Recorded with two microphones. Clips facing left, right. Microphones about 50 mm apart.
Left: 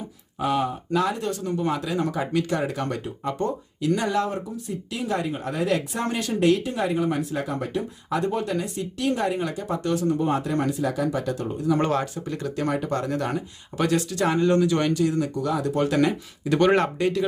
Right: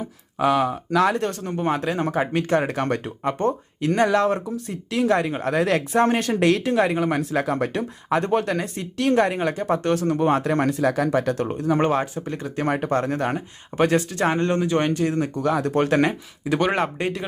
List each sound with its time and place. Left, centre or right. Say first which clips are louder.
0.3 s speech: right 4 dB; right
5.9 s speech: right 8 dB; right
6.3 s speech: right 3 dB; right
8.6 s speech: right 3 dB; right
11.8 s speech: right 3 dB; right
16.4 s speech: left 2 dB; centre
17.0 s speech: left 3 dB; right